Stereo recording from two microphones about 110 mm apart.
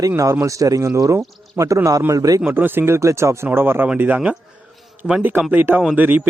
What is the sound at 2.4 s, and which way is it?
A man's voice, 20° right (ahead or behind).